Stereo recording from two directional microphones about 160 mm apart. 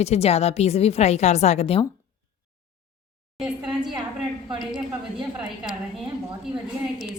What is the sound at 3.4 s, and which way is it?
Speech, 5° right (ahead or behind).